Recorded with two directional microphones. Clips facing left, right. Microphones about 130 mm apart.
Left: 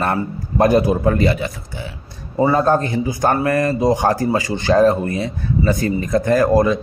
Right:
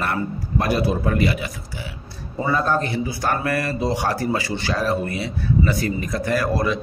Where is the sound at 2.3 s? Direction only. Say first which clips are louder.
Left 7 dB; 30° left (ahead or behind).